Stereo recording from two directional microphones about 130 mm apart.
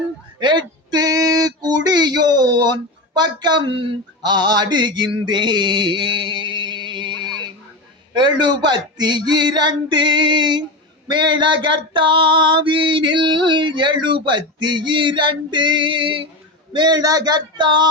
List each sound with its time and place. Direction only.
0.3 s male singing: 35° right (ahead or behind)
8.1 s female singing: 35° right (ahead or behind)